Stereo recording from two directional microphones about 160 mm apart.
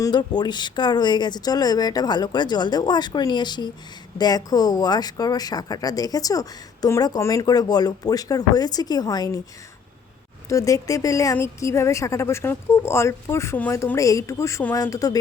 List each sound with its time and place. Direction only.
0.0 s speech: 25° left (ahead or behind)
10.5 s speech: 20° left (ahead or behind)